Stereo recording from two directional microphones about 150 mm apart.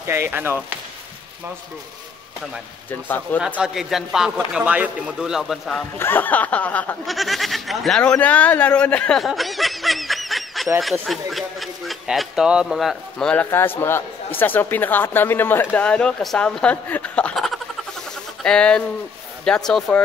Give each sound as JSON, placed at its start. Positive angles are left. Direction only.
{"t": 0.0, "sound": "speech", "side_deg": -15}
{"t": 2.9, "sound": "speech", "side_deg": 10}
{"t": 3.3, "sound": "a man's voice", "side_deg": -5}
{"t": 5.9, "sound": "a man's voice", "side_deg": 15}